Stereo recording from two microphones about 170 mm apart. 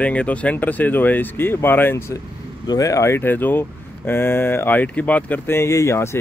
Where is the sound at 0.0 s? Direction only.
10° left (ahead or behind).